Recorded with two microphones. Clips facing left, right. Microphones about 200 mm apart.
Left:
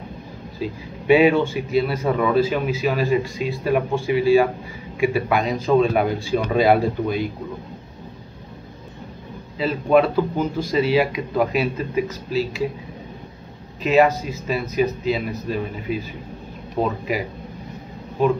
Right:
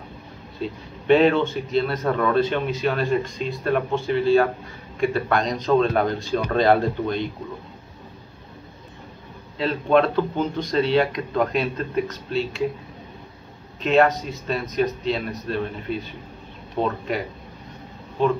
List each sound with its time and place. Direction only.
0.6 s a man's voice: 10° left (ahead or behind)
9.6 s speech: 5° left (ahead or behind)
13.8 s a man's voice: 5° left (ahead or behind)
18.2 s a man's voice: 10° left (ahead or behind)